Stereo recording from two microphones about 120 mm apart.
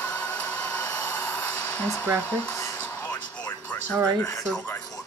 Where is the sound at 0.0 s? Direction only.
10° left (ahead or behind).